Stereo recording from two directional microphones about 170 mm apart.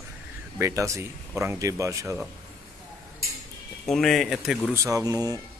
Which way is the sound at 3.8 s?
Centre (ahead or behind).